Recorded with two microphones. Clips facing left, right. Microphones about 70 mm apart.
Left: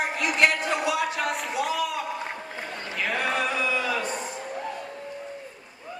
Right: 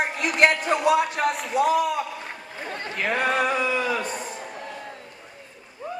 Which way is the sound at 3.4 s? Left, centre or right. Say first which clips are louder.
Right 3 dB; right.